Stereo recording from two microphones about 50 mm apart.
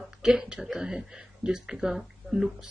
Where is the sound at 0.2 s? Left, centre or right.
Centre.